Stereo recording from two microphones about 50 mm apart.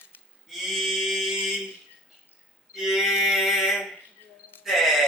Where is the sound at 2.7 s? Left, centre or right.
Centre.